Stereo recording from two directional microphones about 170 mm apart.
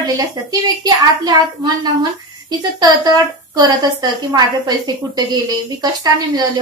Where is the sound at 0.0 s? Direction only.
25° right (ahead or behind).